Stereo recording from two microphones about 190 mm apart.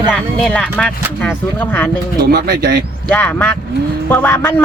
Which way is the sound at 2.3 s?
60° right (ahead or behind).